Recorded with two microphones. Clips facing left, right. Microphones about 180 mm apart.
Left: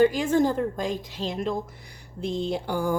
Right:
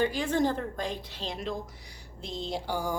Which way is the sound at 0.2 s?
45° left (ahead or behind).